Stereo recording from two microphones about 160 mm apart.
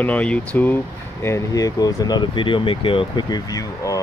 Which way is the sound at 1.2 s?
20° left (ahead or behind).